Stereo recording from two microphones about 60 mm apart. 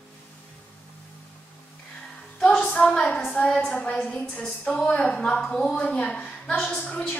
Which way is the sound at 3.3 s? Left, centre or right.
Left.